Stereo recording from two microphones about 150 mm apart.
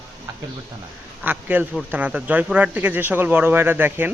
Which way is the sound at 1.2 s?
10° right (ahead or behind).